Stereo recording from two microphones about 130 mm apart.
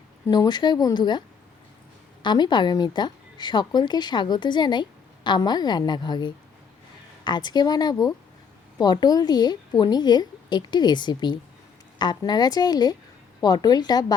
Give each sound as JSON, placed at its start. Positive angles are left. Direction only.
{"t": 0.3, "sound": "a woman's voice", "side_deg": 35}
{"t": 2.2, "sound": "a woman's voice", "side_deg": 35}